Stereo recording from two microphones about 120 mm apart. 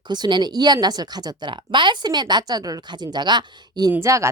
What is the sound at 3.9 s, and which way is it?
Speech, 25° right (ahead or behind).